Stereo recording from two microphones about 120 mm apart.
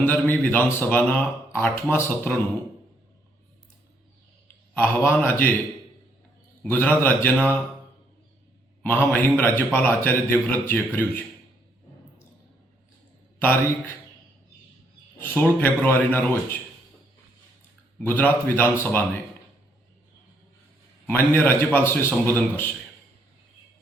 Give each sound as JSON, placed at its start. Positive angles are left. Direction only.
{"t": 0.0, "sound": "speech", "side_deg": 15}
{"t": 4.7, "sound": "speech", "side_deg": 15}
{"t": 6.6, "sound": "speech", "side_deg": 15}
{"t": 8.8, "sound": "a man's voice", "side_deg": 15}
{"t": 13.4, "sound": "speech", "side_deg": 15}
{"t": 15.2, "sound": "speech", "side_deg": 15}
{"t": 18.0, "sound": "speech", "side_deg": 15}
{"t": 21.1, "sound": "speech", "side_deg": 20}